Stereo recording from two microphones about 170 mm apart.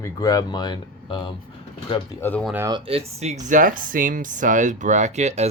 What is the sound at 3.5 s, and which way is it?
Speech, 50° right (ahead or behind).